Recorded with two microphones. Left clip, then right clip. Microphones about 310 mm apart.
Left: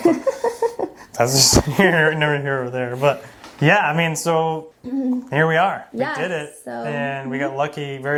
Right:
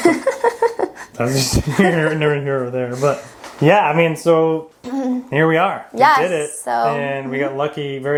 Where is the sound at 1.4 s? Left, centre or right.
Left.